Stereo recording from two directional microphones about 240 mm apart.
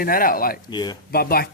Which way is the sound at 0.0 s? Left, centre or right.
Left.